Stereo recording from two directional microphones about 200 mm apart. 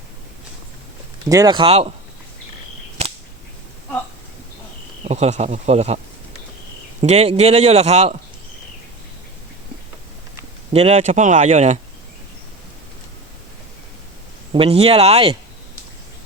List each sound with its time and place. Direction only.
1.3 s speech: 20° right (ahead or behind)
5.0 s a man's voice: 35° right (ahead or behind)
7.0 s a man's voice: 30° right (ahead or behind)
10.7 s a man's voice: 30° right (ahead or behind)
14.5 s speech: 30° right (ahead or behind)